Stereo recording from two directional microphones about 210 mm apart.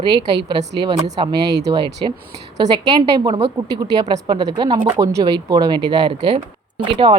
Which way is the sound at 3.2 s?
25° right (ahead or behind).